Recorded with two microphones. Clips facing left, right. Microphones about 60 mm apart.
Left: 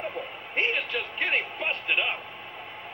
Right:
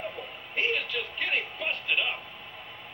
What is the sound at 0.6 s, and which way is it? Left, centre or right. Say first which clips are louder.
Music: left 2 dB; left.